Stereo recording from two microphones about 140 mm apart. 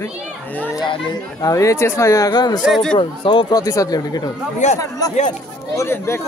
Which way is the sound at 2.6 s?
Centre (ahead or behind).